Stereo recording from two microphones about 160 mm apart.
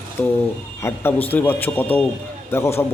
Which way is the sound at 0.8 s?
15° left (ahead or behind).